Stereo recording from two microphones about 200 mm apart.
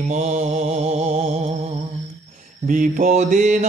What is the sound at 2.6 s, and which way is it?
Mantra, 40° right (ahead or behind).